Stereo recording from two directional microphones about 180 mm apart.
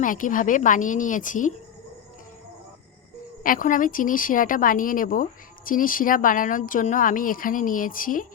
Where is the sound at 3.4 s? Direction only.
50° left (ahead or behind).